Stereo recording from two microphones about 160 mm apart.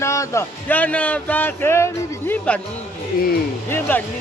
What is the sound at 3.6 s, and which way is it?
Speech, 15° left (ahead or behind).